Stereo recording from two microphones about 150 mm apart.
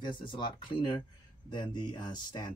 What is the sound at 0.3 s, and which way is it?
Speech, 35° left (ahead or behind).